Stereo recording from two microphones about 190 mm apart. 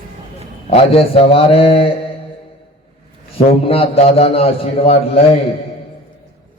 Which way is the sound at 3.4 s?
30° left (ahead or behind).